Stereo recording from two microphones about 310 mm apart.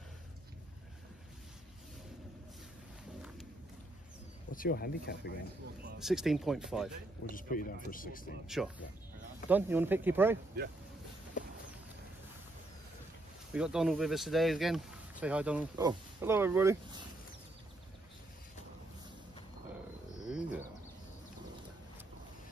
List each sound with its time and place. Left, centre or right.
4.5 s speech: left
5.9 s speech: centre
7.2 s speech: left
8.5 s speech: centre
13.5 s speech: centre
20.2 s bird: centre